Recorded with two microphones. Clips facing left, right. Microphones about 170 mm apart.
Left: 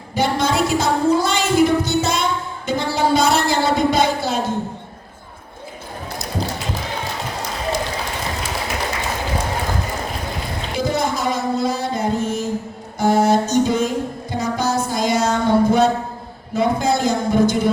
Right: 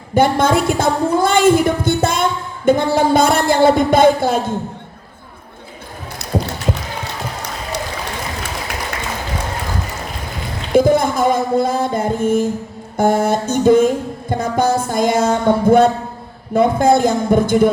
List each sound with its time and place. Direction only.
0.1 s music: 55° right (ahead or behind)
6.3 s run: 65° right (ahead or behind)
10.8 s music: 55° right (ahead or behind)